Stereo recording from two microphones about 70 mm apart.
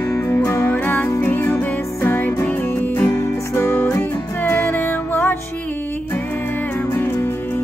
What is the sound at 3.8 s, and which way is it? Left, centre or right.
Music, left.